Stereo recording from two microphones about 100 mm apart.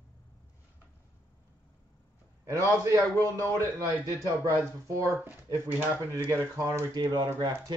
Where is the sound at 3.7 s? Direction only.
40° right (ahead or behind).